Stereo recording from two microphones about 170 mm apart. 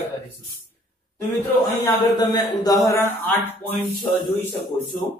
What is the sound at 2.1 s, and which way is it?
Speech, 25° left (ahead or behind).